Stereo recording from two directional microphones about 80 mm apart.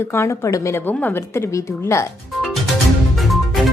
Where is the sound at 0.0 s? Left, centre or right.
Left.